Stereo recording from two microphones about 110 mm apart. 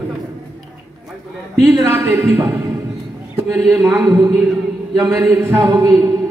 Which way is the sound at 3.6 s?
5° right (ahead or behind).